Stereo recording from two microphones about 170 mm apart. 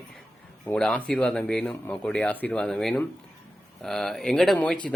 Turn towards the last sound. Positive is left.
turn(degrees=5)  # may be behind; listen again after turning